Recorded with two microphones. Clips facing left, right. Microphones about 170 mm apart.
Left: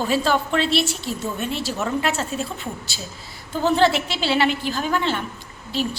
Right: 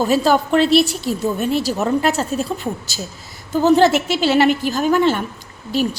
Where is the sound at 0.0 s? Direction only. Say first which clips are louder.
Right 5 dB; 40° right (ahead or behind).